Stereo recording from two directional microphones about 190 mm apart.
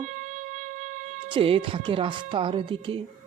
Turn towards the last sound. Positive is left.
turn(degrees=-30)  # may be behind; listen again after turning